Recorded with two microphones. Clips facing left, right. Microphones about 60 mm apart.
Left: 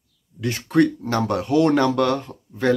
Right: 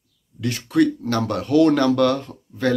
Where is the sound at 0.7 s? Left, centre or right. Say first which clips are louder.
Even; left.